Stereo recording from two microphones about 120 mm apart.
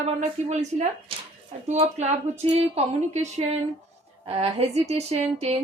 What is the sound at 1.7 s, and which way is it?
Speech, 65° right (ahead or behind).